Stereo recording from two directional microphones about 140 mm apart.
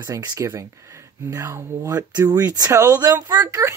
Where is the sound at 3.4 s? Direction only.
15° right (ahead or behind).